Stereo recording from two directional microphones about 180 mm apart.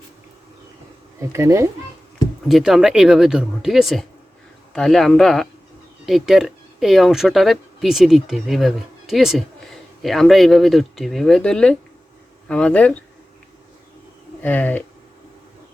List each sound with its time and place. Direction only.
1.3 s speech: 15° right (ahead or behind)
2.5 s speech: centre (ahead or behind)
14.4 s speech: 10° left (ahead or behind)